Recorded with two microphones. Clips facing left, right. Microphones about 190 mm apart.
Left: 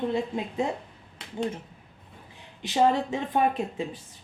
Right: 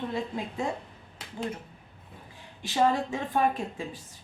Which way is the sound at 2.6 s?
20° left (ahead or behind).